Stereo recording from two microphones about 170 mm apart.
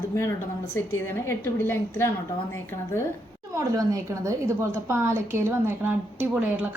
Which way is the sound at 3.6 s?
20° right (ahead or behind).